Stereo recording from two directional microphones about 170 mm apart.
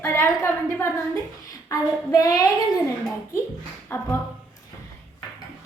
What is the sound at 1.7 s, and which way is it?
Child singing, 20° left (ahead or behind).